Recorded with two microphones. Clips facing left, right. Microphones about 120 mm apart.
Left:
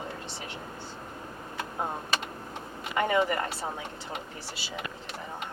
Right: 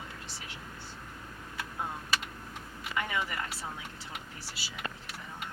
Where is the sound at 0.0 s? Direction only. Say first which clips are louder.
Left 7 dB; 40° left (ahead or behind).